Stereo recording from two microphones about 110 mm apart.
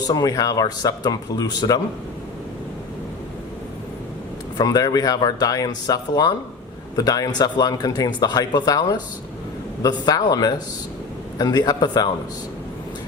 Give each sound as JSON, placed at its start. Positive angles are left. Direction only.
{"t": 0.1, "sound": "speech", "side_deg": 35}
{"t": 4.5, "sound": "speech", "side_deg": 35}